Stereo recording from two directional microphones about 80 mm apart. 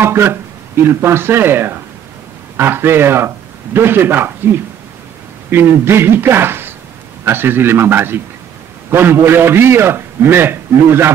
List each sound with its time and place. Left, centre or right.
0.0 s a man's voice: right
5.5 s a man's voice: right